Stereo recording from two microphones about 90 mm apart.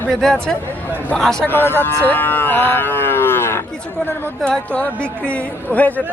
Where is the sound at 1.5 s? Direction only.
25° left (ahead or behind).